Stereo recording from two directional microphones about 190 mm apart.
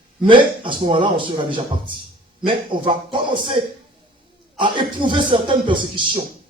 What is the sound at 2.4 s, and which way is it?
A man's voice, 25° right (ahead or behind).